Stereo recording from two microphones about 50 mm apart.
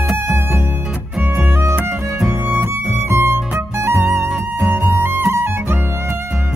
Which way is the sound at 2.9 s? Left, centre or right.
Right.